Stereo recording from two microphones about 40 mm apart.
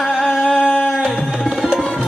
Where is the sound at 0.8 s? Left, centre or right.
Centre.